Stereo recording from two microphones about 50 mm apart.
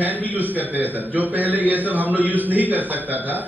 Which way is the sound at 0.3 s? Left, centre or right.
Right.